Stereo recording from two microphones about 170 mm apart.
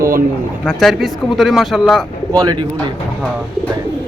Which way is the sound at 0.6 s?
5° left (ahead or behind).